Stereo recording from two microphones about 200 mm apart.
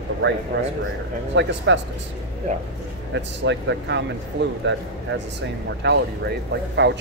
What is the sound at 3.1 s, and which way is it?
Speech, 60° right (ahead or behind).